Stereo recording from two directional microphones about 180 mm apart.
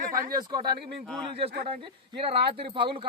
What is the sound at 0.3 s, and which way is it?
Speech, 20° right (ahead or behind).